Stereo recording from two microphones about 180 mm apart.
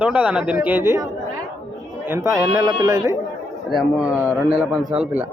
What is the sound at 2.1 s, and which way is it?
A man's voice, 15° right (ahead or behind).